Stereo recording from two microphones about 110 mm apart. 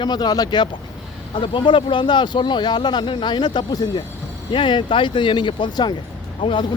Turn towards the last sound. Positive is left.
turn(degrees=50)  # may be behind; listen again after turning